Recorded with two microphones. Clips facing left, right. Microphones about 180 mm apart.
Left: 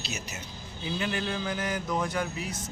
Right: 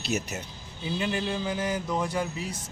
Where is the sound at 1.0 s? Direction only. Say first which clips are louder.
Right 2 dB; 30° right (ahead or behind).